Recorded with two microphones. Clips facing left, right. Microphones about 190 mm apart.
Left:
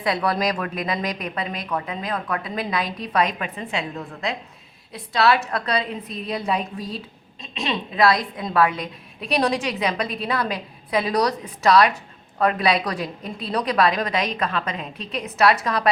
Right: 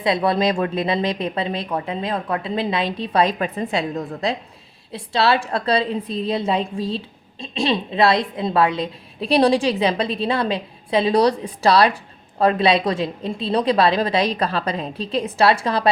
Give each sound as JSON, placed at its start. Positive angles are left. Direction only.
{"t": 0.0, "sound": "a woman's voice", "side_deg": -25}